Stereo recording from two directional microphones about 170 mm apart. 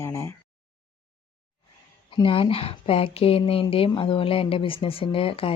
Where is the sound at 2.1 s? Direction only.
30° left (ahead or behind).